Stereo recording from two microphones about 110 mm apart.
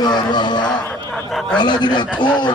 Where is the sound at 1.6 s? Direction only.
40° left (ahead or behind).